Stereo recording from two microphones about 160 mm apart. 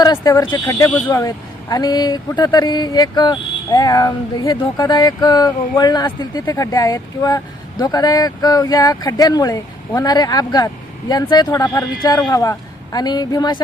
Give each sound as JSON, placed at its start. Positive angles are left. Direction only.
{"t": 0.0, "sound": "speech", "side_deg": 25}